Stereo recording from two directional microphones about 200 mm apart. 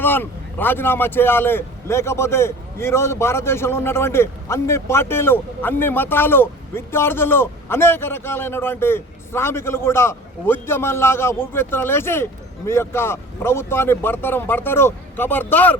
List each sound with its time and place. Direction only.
0.0 s a man's voice: 10° left (ahead or behind)